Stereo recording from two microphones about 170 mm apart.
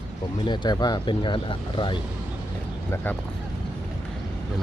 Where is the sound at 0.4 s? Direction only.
25° left (ahead or behind).